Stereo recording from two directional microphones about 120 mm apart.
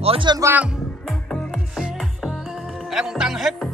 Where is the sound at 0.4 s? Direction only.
20° right (ahead or behind).